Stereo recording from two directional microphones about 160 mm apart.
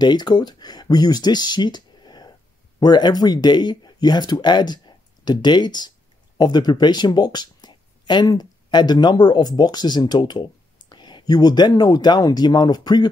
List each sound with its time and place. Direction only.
0.0 s speech: 25° left (ahead or behind)